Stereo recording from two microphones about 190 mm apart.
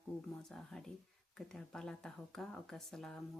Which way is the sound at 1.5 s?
5° left (ahead or behind).